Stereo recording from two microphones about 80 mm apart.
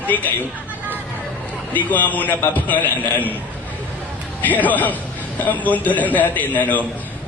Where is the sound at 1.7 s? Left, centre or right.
Left.